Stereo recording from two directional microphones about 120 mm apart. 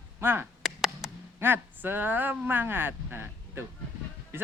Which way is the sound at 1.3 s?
20° right (ahead or behind).